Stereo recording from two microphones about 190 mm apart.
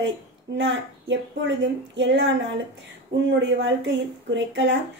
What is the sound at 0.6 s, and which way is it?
Speech, 70° right (ahead or behind).